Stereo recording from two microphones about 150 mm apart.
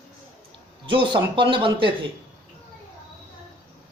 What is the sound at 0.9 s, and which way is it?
Speech, 35° right (ahead or behind).